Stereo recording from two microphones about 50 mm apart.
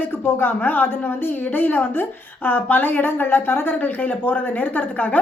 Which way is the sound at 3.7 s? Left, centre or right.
Left.